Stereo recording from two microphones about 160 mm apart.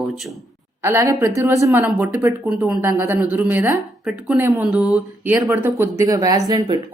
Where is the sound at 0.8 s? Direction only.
15° right (ahead or behind).